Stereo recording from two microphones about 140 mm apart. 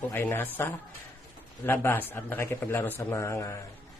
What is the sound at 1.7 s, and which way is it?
Speech, 15° left (ahead or behind).